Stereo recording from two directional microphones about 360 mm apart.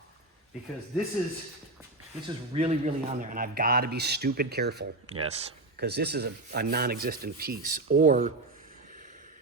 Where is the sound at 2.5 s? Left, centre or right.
Centre.